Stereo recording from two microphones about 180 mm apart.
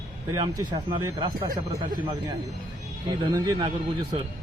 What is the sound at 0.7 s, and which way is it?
Speech, 25° right (ahead or behind).